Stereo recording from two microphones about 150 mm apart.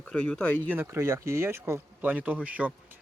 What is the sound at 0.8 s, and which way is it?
Speech, 20° right (ahead or behind).